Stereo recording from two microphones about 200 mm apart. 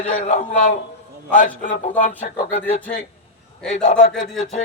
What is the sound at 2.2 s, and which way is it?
Speech, 30° left (ahead or behind).